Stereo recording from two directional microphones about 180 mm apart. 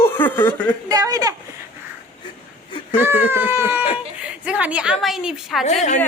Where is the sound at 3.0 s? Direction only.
10° right (ahead or behind).